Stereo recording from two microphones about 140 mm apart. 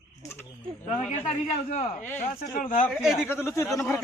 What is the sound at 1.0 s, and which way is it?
Speech, 55° left (ahead or behind).